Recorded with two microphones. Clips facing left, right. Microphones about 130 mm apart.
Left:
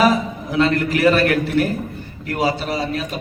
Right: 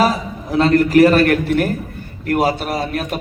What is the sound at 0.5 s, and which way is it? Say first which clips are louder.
A man's voice: right 6 dB; 40° right (ahead or behind).